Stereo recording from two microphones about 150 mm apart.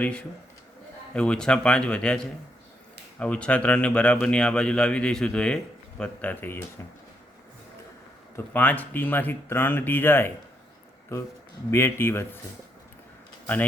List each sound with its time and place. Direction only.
0.0 s speech: 5° left (ahead or behind)
8.4 s speech: 10° left (ahead or behind)
11.7 s speech: 15° left (ahead or behind)